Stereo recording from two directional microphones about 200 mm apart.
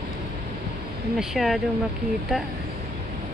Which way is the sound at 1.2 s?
Centre (ahead or behind).